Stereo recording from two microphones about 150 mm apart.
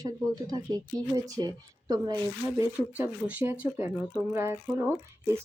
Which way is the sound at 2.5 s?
10° right (ahead or behind).